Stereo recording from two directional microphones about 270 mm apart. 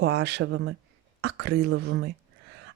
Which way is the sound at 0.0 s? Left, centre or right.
Right.